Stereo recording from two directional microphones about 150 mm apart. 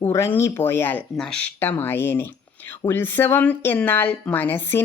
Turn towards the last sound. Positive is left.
turn(degrees=15)  # may be behind; listen again after turning